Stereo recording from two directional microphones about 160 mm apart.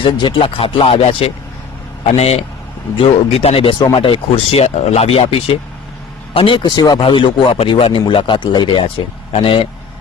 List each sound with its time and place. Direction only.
0.0 s a man's voice: 30° left (ahead or behind)